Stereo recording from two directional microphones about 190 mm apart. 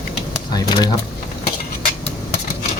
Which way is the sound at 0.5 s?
20° left (ahead or behind).